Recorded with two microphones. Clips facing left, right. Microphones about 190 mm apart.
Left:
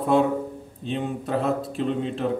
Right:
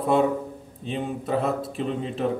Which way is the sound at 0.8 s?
Centre (ahead or behind).